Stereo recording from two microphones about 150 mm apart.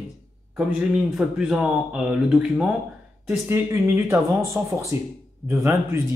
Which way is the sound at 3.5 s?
15° right (ahead or behind).